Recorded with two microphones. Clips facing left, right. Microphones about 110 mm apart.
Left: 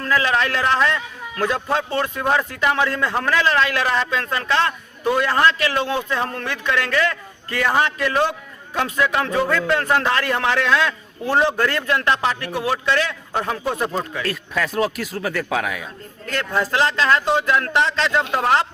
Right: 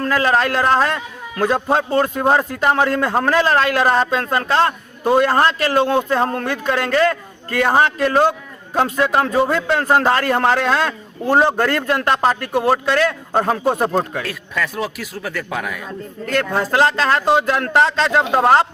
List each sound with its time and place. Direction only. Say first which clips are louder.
0.0 s a man's voice: right 3 dB; 40° right (ahead or behind)
14.3 s speech: left 1 dB; centre (ahead or behind)
16.3 s a man's voice: right 4 dB; 45° right (ahead or behind)